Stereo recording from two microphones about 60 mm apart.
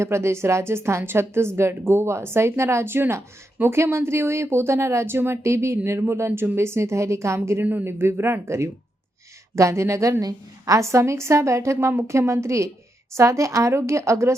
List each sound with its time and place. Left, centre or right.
0.0 s a woman's voice: right
7.6 s speech: right
7.9 s a woman's voice: right
10.8 s a woman's voice: right